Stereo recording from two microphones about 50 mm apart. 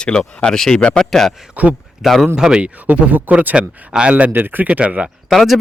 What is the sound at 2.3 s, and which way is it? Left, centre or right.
Speech, centre.